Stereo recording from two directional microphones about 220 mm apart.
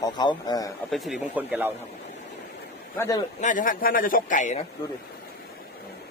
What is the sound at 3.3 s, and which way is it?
Speech, 35° left (ahead or behind).